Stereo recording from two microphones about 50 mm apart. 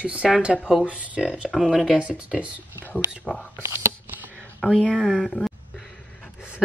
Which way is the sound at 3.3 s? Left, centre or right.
Centre.